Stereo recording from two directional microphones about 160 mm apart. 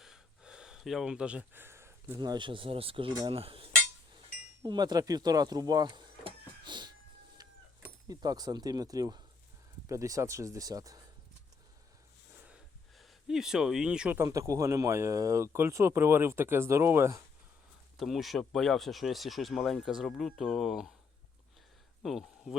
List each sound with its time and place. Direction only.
0.0 s speech: 5° right (ahead or behind); by 3.2 s 35° right (ahead or behind)
3.2 s cutlery: 35° right (ahead or behind)
4.6 s speech: 25° right (ahead or behind)
8.0 s speech: 25° right (ahead or behind)
12.5 s a sound: 5° right (ahead or behind)
14.2 s speech: 20° right (ahead or behind)
17.9 s speech: centre (ahead or behind)
22.0 s speech: centre (ahead or behind)